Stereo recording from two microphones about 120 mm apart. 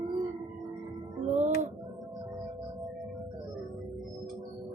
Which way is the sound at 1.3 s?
75° right (ahead or behind).